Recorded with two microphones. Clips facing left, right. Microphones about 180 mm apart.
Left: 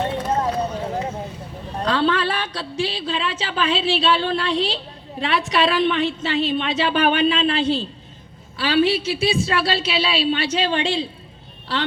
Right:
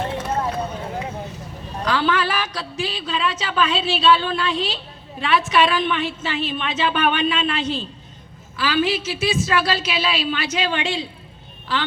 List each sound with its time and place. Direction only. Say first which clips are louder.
0.0 s vehicle: left 2 dB; 30° left (ahead or behind)
1.8 s a woman's voice: left 1 dB; 30° left (ahead or behind)